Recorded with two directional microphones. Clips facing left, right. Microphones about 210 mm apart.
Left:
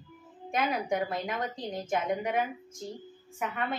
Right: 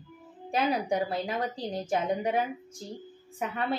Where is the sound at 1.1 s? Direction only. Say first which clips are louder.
Right 2 dB; 30° right (ahead or behind).